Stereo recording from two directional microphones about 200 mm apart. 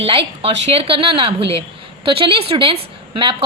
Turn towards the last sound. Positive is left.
turn(degrees=-25)  # may be behind; listen again after turning